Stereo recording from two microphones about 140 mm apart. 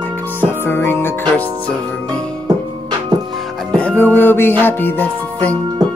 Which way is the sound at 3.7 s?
10° left (ahead or behind).